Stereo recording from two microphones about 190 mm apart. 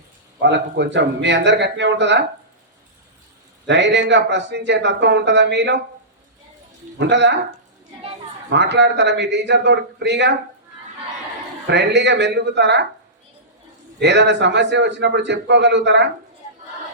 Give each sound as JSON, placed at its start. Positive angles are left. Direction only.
{"t": 0.4, "sound": "speech", "side_deg": -70}
{"t": 3.7, "sound": "speech", "side_deg": -70}
{"t": 7.0, "sound": "speech", "side_deg": -65}
{"t": 8.4, "sound": "a man's voice", "side_deg": -70}
{"t": 11.7, "sound": "a man's voice", "side_deg": -65}
{"t": 14.0, "sound": "speech", "side_deg": -65}